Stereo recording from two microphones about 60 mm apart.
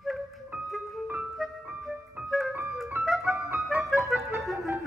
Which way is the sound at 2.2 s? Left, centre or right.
Right.